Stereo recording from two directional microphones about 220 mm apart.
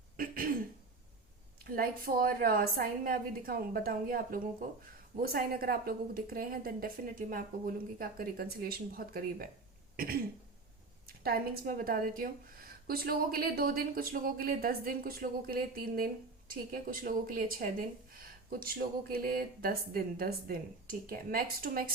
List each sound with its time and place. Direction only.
0.2 s throat clearing: 40° right (ahead or behind)
1.6 s a woman's voice: 40° right (ahead or behind)
11.0 s a woman's voice: 45° right (ahead or behind)